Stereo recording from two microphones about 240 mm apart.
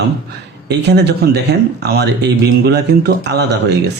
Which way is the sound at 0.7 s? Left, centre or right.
Right.